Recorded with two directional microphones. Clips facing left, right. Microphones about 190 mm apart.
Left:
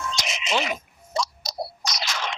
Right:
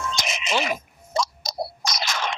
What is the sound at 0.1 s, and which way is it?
Music, 50° right (ahead or behind).